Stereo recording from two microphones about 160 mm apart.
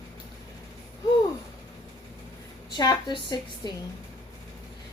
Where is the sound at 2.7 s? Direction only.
25° left (ahead or behind).